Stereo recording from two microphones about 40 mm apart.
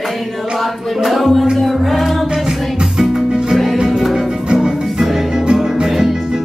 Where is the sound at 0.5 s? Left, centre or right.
Centre.